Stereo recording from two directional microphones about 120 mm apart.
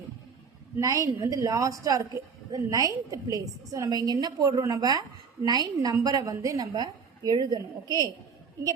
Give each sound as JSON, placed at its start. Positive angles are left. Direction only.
{"t": 0.8, "sound": "a woman's voice", "side_deg": -25}